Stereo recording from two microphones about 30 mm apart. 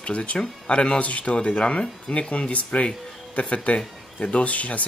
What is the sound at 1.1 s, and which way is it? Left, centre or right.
Speech, left.